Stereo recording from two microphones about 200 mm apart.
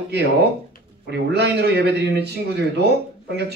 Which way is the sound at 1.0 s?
55° right (ahead or behind).